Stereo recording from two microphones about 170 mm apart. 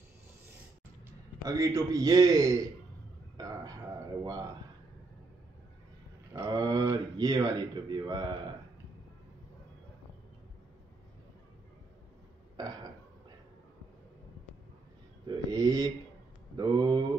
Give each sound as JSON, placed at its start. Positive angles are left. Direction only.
{"t": 1.4, "sound": "a man's voice", "side_deg": -20}
{"t": 3.3, "sound": "a sound", "side_deg": -20}
{"t": 6.3, "sound": "a man's voice", "side_deg": -20}
{"t": 12.5, "sound": "burping", "side_deg": -25}
{"t": 15.2, "sound": "a man's voice", "side_deg": -20}